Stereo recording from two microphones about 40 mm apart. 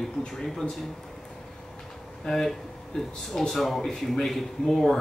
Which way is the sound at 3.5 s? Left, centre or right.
Centre.